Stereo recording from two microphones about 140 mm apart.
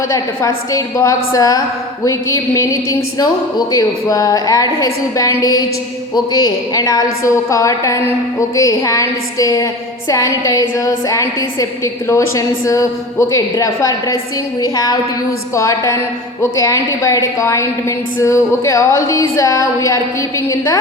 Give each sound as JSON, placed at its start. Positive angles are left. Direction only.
{"t": 0.1, "sound": "a woman's voice", "side_deg": 25}